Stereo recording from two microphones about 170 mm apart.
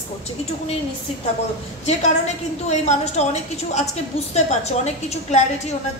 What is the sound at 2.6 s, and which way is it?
A woman's voice, 40° left (ahead or behind).